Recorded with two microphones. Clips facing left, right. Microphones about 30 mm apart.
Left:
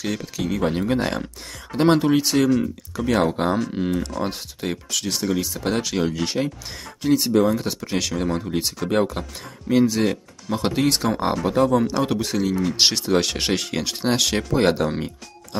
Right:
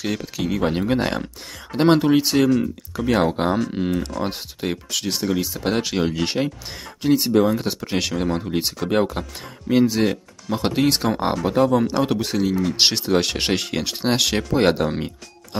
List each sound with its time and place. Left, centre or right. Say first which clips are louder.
0.0 s speech: right 1 dB; centre
5.6 s speech: right 1 dB; centre